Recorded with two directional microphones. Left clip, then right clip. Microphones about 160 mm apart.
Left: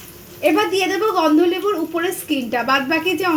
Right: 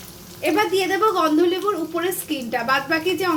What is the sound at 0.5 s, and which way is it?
A woman's voice, 40° left (ahead or behind).